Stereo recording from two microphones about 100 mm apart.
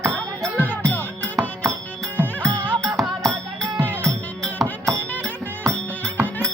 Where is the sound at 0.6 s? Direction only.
15° left (ahead or behind).